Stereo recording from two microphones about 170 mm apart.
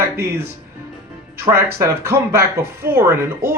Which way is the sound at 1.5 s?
15° right (ahead or behind).